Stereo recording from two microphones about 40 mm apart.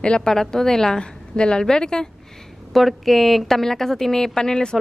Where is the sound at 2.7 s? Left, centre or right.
Centre.